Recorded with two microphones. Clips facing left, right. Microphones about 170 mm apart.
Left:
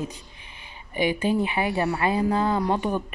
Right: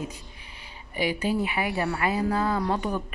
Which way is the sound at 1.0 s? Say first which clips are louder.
Left 3 dB; 20° left (ahead or behind).